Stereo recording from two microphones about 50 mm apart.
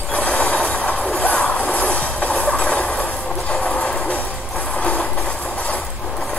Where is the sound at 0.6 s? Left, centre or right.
Centre.